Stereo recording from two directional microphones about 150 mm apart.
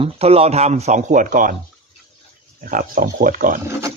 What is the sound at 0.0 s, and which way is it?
Speech, 40° right (ahead or behind).